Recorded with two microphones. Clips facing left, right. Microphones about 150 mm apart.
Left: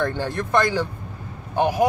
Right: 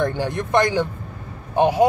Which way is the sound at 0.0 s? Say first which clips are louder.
Right 2 dB; 15° right (ahead or behind).